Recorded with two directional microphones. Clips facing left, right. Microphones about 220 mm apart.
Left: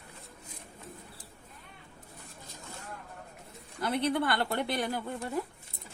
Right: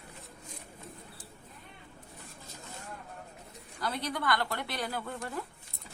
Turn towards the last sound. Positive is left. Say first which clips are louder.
# left 4 dB
turn(degrees=20)  # may be behind; listen again after turning